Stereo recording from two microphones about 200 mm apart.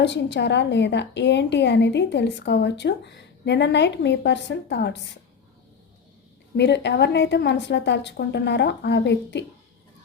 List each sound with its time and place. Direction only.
0.0 s a woman's voice: 60° left (ahead or behind)
6.6 s a woman's voice: 60° left (ahead or behind)